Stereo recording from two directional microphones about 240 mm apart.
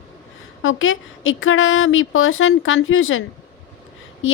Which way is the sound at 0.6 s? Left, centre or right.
Left.